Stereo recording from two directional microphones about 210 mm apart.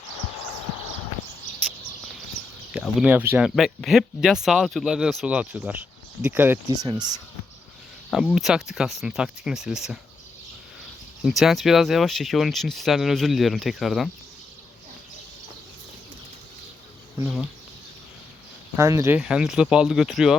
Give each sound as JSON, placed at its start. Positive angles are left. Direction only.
{"t": 2.4, "sound": "a sound", "side_deg": 45}
{"t": 2.7, "sound": "speech", "side_deg": -5}
{"t": 8.1, "sound": "speech", "side_deg": 0}
{"t": 11.2, "sound": "speech", "side_deg": 0}
{"t": 17.2, "sound": "speech", "side_deg": -5}
{"t": 18.8, "sound": "speech", "side_deg": -15}